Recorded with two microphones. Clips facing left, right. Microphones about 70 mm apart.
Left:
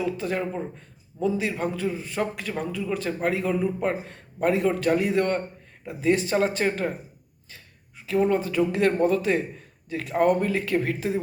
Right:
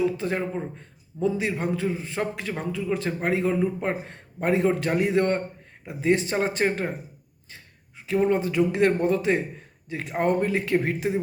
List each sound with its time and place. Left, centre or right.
0.0 s a man's voice: right
8.0 s a man's voice: right